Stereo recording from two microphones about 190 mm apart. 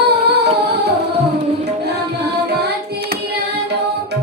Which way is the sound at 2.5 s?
60° right (ahead or behind).